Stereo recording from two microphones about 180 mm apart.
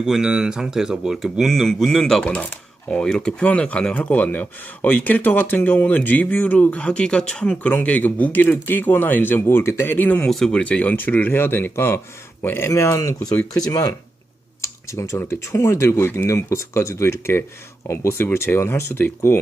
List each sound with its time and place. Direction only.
0.0 s speech: 5° right (ahead or behind); by 19.4 s 15° left (ahead or behind)